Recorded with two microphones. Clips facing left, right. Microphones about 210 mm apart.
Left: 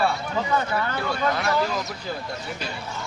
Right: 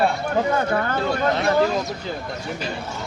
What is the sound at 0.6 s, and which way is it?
Speech, 50° right (ahead or behind).